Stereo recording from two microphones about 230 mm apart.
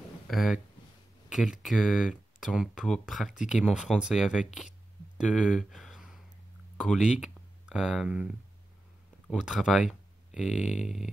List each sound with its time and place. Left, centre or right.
0.3 s speech: centre
4.6 s a sound: centre
6.8 s speech: centre
9.3 s speech: centre
10.5 s speech: left